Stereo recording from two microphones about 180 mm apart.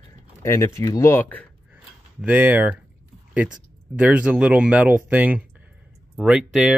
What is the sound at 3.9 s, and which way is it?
Speech, 10° right (ahead or behind).